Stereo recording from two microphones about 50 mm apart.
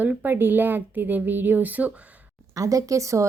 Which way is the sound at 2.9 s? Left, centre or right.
Right.